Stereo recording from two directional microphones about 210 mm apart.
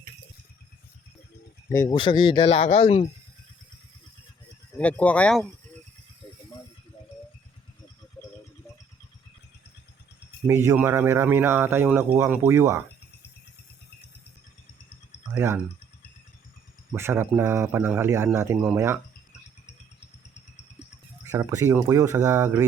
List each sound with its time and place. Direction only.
1.7 s speech: 15° left (ahead or behind)
4.8 s speech: 5° left (ahead or behind)
10.4 s speech: 10° right (ahead or behind)
15.4 s speech: 10° right (ahead or behind)
16.9 s speech: 10° right (ahead or behind)
21.2 s speech: 15° right (ahead or behind)